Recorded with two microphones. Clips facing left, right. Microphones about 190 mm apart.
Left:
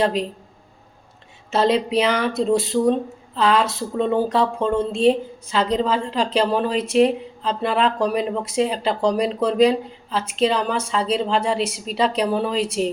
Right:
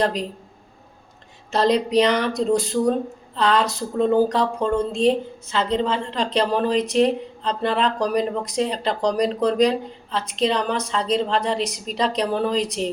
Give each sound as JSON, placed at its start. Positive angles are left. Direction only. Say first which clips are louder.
{"t": 0.0, "sound": "speech", "louder": "left 2 dB", "side_deg": 5}
{"t": 1.5, "sound": "speech", "louder": "left 1 dB", "side_deg": 5}